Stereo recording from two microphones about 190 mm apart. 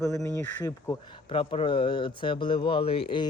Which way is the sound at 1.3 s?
30° left (ahead or behind).